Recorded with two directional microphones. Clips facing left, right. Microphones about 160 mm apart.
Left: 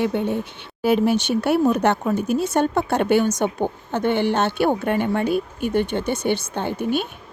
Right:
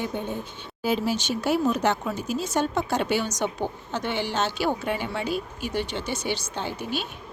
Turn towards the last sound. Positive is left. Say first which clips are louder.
# left 7 dB
turn(degrees=55)  # may be behind; listen again after turning